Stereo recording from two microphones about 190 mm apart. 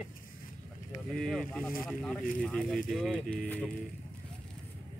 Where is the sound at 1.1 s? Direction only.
Centre (ahead or behind).